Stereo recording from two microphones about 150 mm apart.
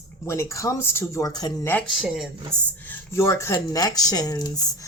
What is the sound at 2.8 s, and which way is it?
Speech, 15° left (ahead or behind).